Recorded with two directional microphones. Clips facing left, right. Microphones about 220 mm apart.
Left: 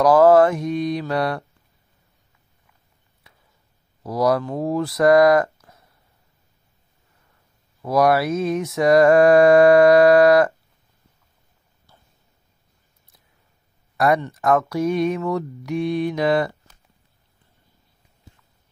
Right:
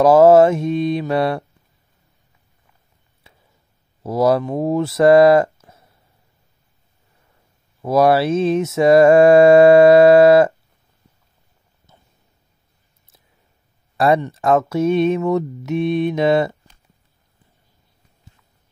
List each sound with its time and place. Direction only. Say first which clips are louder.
0.0 s mantra: right 3 dB; 25° right (ahead or behind)
3.3 s a sound: right 4 dB; 25° right (ahead or behind)
4.0 s speech: right 3 dB; 25° right (ahead or behind)
7.8 s mantra: right 3 dB; 25° right (ahead or behind)
11.9 s a sound: right 3 dB; 20° right (ahead or behind)
13.9 s mantra: right 3 dB; 30° right (ahead or behind)